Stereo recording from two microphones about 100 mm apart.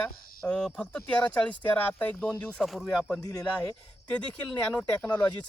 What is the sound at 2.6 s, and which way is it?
Speech, centre (ahead or behind).